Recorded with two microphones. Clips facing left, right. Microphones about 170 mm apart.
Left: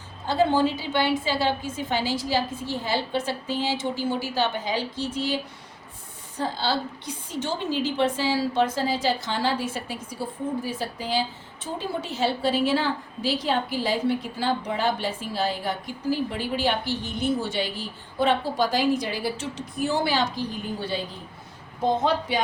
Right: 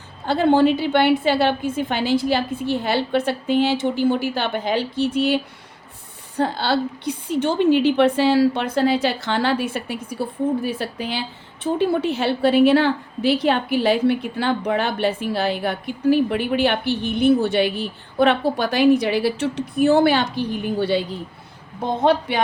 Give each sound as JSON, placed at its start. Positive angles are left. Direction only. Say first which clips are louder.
{"t": 0.3, "sound": "a woman's voice", "louder": "right 6 dB", "side_deg": -60}
{"t": 22.3, "sound": "a woman's voice", "louder": "right 4 dB", "side_deg": -60}